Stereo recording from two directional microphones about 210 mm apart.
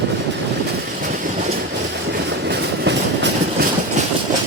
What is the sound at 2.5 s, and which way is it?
Train, 55° right (ahead or behind).